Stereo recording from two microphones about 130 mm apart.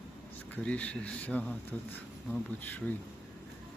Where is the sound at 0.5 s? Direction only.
10° left (ahead or behind).